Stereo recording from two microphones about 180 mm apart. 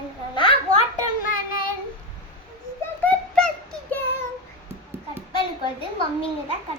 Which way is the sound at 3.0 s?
5° left (ahead or behind).